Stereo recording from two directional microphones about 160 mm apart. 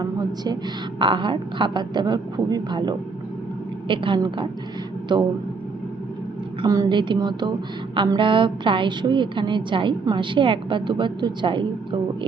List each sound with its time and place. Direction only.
0.9 s a woman's voice: 30° right (ahead or behind)
6.6 s a woman's voice: 25° right (ahead or behind)